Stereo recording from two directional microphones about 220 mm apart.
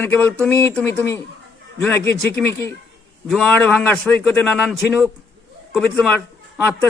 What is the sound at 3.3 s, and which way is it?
Speech, centre (ahead or behind).